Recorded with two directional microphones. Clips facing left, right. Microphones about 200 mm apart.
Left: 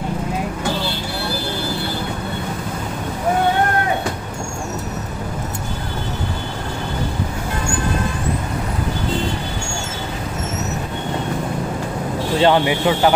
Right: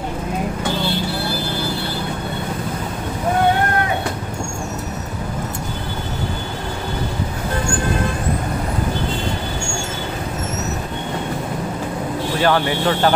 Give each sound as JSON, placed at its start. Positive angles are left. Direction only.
{"t": 12.4, "sound": "speech", "side_deg": 20}